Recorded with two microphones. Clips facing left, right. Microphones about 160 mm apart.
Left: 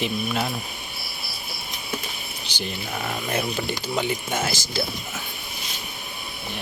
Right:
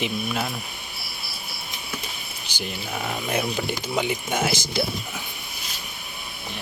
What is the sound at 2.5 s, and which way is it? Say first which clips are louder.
Speech: even; 5° right (ahead or behind).